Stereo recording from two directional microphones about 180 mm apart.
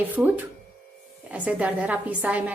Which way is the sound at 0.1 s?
10° right (ahead or behind).